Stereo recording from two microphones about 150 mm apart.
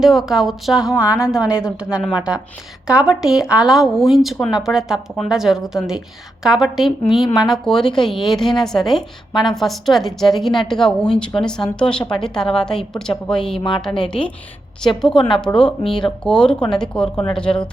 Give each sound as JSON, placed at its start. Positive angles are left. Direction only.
{"t": 0.0, "sound": "a woman's voice", "side_deg": 0}
{"t": 13.6, "sound": "a woman's voice", "side_deg": 30}
{"t": 14.0, "sound": "a woman's voice", "side_deg": 5}